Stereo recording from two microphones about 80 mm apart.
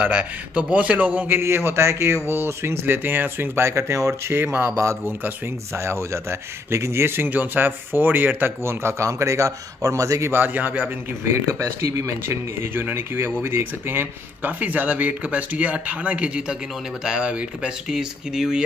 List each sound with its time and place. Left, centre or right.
0.0 s speech: centre
1.4 s speech: right
5.8 s speech: right
10.3 s speech: right
11.5 s speech: right; by 18.6 s centre